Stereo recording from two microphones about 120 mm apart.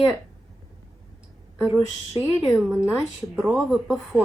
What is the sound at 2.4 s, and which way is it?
Speech, 5° right (ahead or behind).